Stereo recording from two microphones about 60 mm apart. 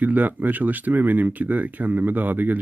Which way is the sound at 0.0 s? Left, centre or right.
Right.